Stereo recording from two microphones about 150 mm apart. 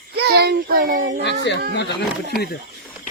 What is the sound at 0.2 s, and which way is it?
Child singing, 90° right.